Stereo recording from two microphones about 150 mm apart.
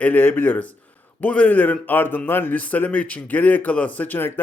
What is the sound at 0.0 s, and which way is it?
Speech, 10° left (ahead or behind).